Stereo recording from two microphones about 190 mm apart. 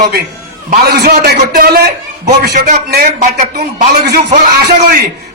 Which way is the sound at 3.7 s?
60° right (ahead or behind).